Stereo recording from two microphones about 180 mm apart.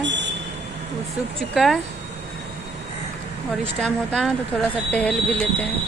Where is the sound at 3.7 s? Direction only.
5° left (ahead or behind).